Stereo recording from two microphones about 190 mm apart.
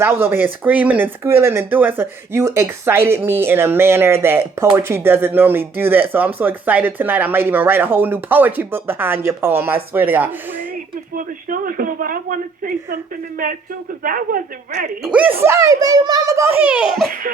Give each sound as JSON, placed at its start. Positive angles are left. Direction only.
{"t": 0.0, "sound": "speech", "side_deg": -15}
{"t": 11.1, "sound": "speech", "side_deg": -45}
{"t": 15.0, "sound": "speech", "side_deg": -5}